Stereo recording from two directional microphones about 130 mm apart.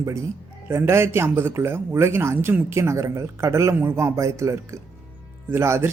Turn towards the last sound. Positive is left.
turn(degrees=-20)  # may be behind; listen again after turning